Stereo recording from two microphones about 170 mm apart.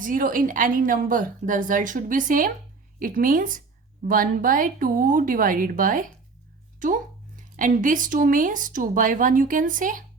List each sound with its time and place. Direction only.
0.0 s a woman's voice: 55° right (ahead or behind)